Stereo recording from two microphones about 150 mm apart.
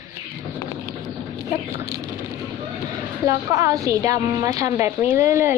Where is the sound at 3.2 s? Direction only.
20° right (ahead or behind).